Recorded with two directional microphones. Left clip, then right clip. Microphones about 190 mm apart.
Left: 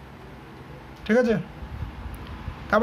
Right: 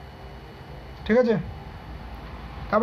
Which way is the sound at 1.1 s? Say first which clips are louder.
Right 1 dB; 20° left (ahead or behind).